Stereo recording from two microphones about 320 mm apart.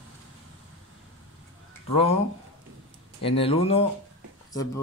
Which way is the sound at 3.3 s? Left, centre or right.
Centre.